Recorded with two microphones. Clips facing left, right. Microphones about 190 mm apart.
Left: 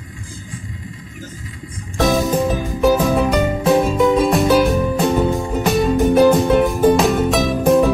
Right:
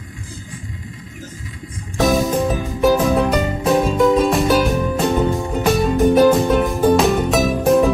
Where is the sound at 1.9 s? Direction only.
Centre (ahead or behind).